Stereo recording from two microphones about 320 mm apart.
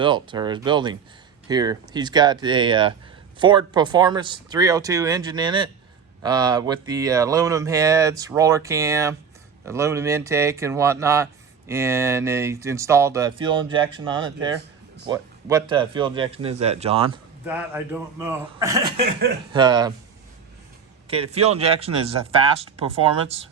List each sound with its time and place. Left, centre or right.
0.0 s speech: centre
17.4 s speech: centre
21.1 s speech: centre